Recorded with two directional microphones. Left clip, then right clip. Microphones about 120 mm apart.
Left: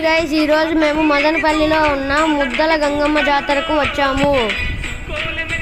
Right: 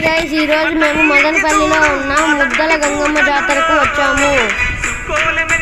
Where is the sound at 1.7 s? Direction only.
40° right (ahead or behind).